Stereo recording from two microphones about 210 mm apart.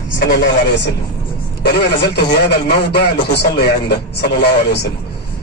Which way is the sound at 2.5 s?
50° left (ahead or behind).